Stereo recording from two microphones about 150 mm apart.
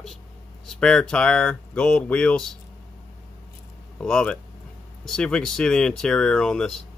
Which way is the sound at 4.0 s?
5° left (ahead or behind).